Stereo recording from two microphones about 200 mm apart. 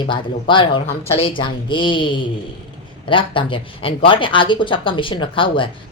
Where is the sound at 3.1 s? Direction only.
25° left (ahead or behind).